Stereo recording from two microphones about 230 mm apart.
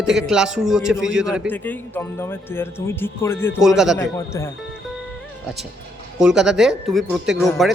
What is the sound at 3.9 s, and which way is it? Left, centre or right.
Speech, centre.